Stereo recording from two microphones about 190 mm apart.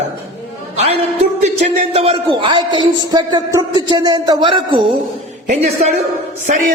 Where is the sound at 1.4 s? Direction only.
35° right (ahead or behind).